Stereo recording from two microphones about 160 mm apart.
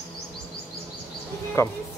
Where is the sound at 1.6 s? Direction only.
15° left (ahead or behind).